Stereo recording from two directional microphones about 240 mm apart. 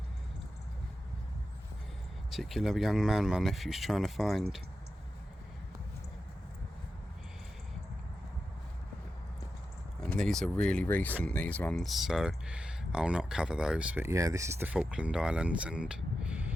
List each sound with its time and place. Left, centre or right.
2.3 s speech: centre
10.0 s speech: centre